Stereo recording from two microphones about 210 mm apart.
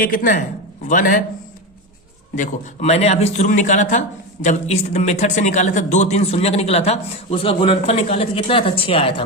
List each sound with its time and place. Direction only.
0.0 s a man's voice: 40° left (ahead or behind)
2.3 s a man's voice: 35° left (ahead or behind)